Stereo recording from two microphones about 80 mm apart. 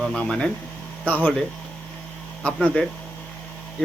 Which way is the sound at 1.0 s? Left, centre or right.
Left.